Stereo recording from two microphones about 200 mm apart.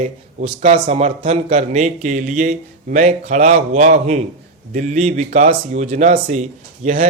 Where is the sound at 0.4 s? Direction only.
30° right (ahead or behind).